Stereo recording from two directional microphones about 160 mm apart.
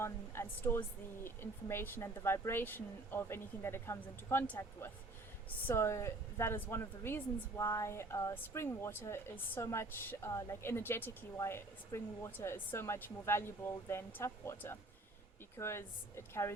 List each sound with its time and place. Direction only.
0.0 s a woman's voice: 15° left (ahead or behind)